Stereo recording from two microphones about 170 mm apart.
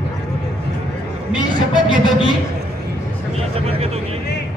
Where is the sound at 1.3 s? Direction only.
5° right (ahead or behind).